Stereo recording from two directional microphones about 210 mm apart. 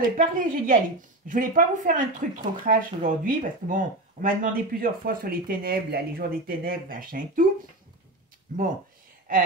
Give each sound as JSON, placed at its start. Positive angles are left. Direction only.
{"t": 0.0, "sound": "speech", "side_deg": -40}